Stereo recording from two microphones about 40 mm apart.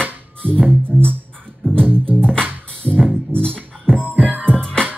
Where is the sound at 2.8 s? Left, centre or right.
Right.